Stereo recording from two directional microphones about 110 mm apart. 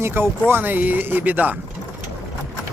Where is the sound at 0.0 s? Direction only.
20° right (ahead or behind).